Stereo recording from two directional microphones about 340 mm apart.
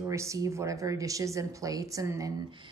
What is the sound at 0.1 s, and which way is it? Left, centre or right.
A woman's voice, centre.